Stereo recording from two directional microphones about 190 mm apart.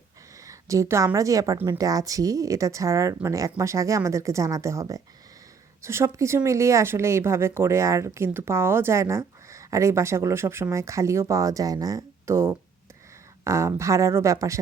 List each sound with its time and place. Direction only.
0.4 s speech: 15° right (ahead or behind)